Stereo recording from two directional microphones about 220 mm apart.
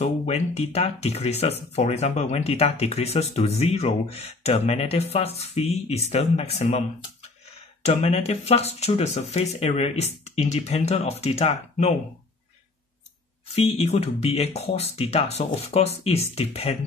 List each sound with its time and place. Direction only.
0.0 s speech: 30° left (ahead or behind)
13.6 s speech: 30° left (ahead or behind)